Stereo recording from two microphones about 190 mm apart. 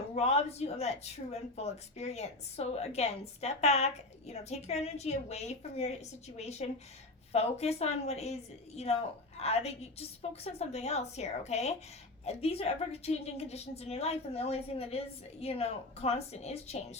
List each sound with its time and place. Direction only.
0.2 s speech: 35° left (ahead or behind)